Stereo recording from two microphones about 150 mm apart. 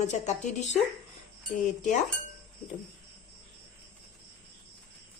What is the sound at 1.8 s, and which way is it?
Speech, 55° left (ahead or behind).